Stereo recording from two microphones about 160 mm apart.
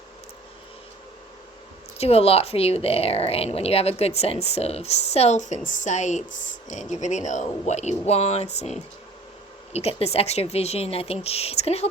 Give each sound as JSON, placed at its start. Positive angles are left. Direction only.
{"t": 2.0, "sound": "speech", "side_deg": 40}
{"t": 9.7, "sound": "speech", "side_deg": 40}